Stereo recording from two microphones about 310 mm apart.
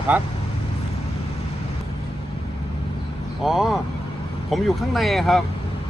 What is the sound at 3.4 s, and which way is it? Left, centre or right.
Speech, centre.